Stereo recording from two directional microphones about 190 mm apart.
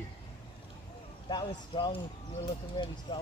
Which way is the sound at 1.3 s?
20° left (ahead or behind).